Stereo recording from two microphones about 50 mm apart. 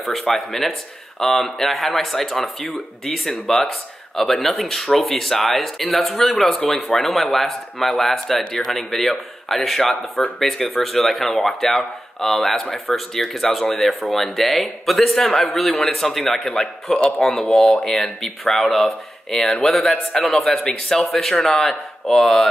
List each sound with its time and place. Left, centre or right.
0.3 s speech: centre
20.3 s speech: centre